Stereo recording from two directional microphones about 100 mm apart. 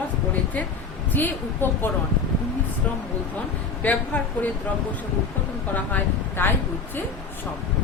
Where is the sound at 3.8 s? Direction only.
15° left (ahead or behind).